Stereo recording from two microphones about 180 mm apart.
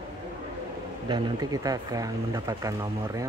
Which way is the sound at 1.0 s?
20° right (ahead or behind).